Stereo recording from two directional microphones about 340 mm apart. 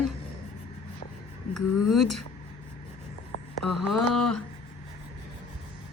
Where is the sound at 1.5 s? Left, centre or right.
Centre.